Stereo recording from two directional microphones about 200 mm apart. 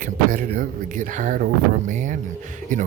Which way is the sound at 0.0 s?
45° right (ahead or behind).